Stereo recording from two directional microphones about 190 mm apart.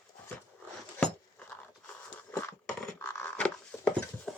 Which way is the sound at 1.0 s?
5° left (ahead or behind).